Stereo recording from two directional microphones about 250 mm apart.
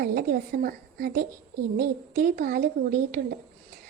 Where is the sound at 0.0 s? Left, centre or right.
Right.